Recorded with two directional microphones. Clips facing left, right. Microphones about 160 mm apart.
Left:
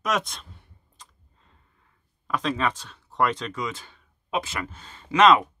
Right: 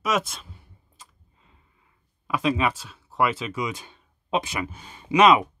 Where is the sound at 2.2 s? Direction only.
10° right (ahead or behind).